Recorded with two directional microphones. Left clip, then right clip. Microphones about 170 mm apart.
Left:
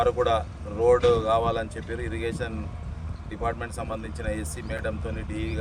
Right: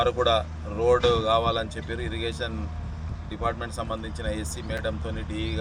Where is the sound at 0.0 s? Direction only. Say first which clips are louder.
Even; 15° left (ahead or behind).